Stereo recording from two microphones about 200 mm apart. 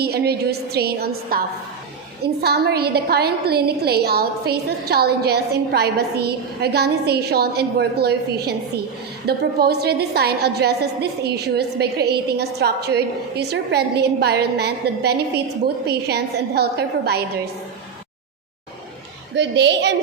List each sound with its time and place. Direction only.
0.0 s a woman's voice: 50° right (ahead or behind)
19.4 s a woman's voice: 60° right (ahead or behind)